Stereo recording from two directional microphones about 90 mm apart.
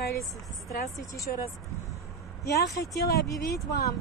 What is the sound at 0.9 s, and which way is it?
Speech, 35° left (ahead or behind).